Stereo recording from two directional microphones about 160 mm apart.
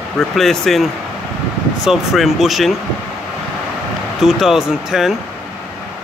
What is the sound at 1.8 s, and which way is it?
Speech, centre (ahead or behind).